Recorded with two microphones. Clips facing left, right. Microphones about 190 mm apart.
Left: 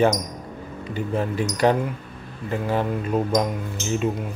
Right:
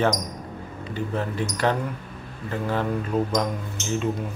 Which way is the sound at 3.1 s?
25° left (ahead or behind).